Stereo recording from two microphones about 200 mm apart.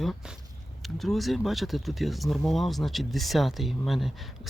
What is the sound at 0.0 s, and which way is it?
Speech, centre (ahead or behind).